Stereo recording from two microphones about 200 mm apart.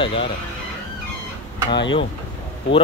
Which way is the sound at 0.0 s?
25° left (ahead or behind).